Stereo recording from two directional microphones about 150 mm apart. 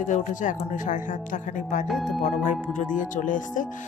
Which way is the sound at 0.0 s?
60° left (ahead or behind).